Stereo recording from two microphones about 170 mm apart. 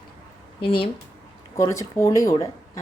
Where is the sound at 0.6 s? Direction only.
30° left (ahead or behind).